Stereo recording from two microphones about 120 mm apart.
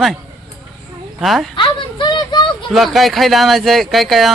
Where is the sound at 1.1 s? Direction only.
Centre (ahead or behind).